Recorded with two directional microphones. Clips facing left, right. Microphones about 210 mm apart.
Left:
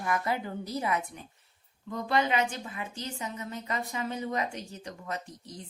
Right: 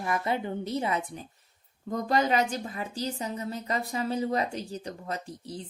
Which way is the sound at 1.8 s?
40° right (ahead or behind).